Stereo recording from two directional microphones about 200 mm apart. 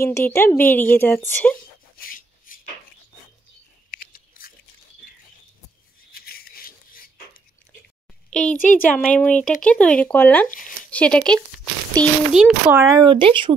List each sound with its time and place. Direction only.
0.0 s speech: 15° left (ahead or behind)
2.0 s rub: 45° left (ahead or behind)
3.9 s a sound: 45° left (ahead or behind)
6.1 s a sound: 50° left (ahead or behind)
8.3 s a child's voice: 5° left (ahead or behind); by 13.0 s 10° right (ahead or behind)
13.0 s speech: 25° right (ahead or behind)